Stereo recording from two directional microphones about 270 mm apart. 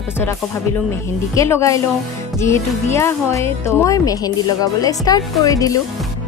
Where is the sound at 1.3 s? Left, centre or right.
Centre.